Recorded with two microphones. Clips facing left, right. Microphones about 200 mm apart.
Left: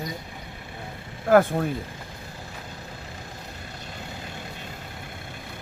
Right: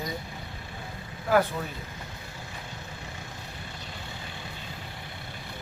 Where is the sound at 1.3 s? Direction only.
50° left (ahead or behind).